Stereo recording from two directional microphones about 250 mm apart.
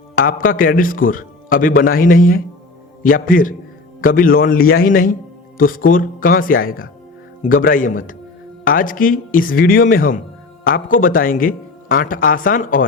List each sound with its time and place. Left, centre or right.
0.2 s speech: left